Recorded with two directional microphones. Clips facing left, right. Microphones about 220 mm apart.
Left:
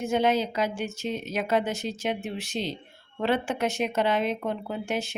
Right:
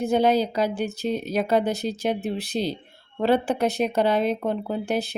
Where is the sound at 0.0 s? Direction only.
35° right (ahead or behind).